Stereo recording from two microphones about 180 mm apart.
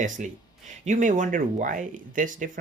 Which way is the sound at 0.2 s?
45° right (ahead or behind).